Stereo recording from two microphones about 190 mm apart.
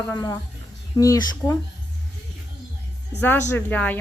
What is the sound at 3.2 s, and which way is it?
Speech, 10° left (ahead or behind).